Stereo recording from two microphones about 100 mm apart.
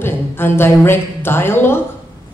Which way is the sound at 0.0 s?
20° left (ahead or behind).